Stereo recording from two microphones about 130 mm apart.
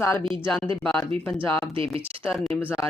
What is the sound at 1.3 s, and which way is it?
Speech, 45° right (ahead or behind).